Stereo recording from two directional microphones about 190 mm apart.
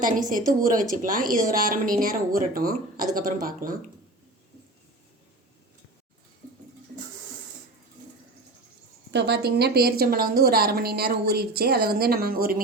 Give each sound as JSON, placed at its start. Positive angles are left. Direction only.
{"t": 0.0, "sound": "speech", "side_deg": -45}
{"t": 9.1, "sound": "a woman's voice", "side_deg": -60}